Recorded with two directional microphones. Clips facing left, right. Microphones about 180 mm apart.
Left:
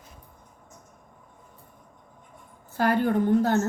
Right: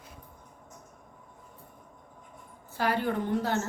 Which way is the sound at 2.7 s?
50° left (ahead or behind).